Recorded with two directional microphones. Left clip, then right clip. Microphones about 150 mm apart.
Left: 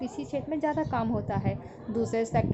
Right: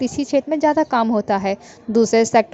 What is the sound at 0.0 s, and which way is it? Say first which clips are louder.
A woman's voice: right 14 dB; 45° right (ahead or behind).